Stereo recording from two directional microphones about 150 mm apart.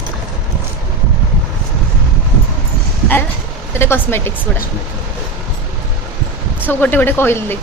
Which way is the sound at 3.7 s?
15° left (ahead or behind).